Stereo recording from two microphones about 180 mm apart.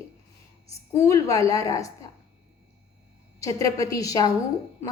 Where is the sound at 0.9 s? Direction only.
15° left (ahead or behind).